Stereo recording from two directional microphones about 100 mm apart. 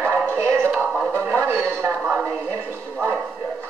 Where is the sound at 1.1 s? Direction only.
20° right (ahead or behind).